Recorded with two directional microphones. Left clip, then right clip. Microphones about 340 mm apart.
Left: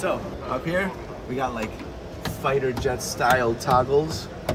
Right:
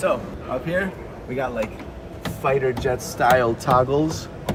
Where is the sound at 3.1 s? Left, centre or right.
Right.